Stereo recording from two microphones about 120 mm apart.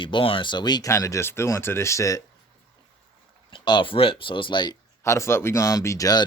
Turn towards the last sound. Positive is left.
turn(degrees=30)  # may be behind; listen again after turning